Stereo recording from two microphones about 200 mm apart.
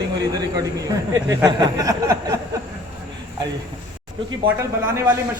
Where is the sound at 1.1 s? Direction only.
15° right (ahead or behind).